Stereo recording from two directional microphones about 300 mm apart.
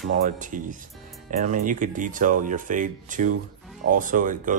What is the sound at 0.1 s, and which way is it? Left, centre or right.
Speech, right.